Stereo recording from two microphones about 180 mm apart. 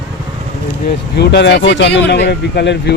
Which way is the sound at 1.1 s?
65° left (ahead or behind).